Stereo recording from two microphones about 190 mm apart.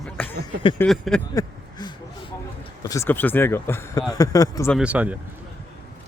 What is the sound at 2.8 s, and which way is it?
Speech, 15° left (ahead or behind).